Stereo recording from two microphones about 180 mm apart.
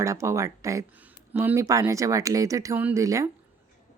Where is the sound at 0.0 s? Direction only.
15° right (ahead or behind).